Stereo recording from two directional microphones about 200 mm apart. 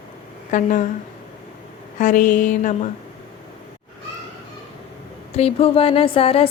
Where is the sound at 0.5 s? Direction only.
40° left (ahead or behind).